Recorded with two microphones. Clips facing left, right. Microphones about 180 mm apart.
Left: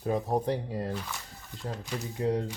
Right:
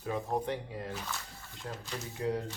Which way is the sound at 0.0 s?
35° left (ahead or behind).